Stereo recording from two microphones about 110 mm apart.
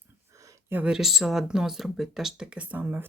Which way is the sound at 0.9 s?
Centre (ahead or behind).